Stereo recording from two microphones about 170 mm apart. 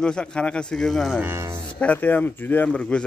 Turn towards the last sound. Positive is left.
turn(degrees=5)  # may be behind; listen again after turning